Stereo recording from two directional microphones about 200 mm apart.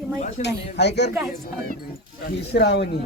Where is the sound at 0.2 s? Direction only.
35° left (ahead or behind).